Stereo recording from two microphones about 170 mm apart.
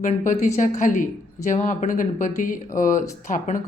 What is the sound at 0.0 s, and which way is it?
Speech, 45° left (ahead or behind).